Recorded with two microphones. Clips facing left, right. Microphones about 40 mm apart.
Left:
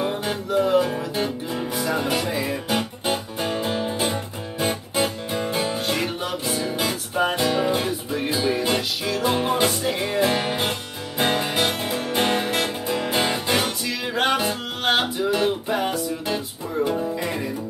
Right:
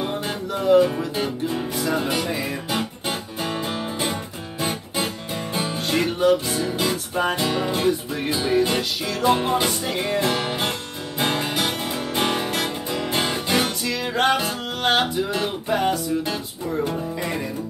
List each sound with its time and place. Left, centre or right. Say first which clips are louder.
0.0 s music: left 1 dB; centre
12.3 s music: left 1 dB; left
12.8 s music: left 1 dB; centre